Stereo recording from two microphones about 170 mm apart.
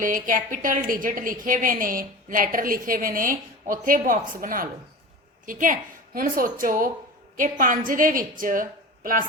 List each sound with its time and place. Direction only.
0.0 s a woman's voice: 50° right (ahead or behind)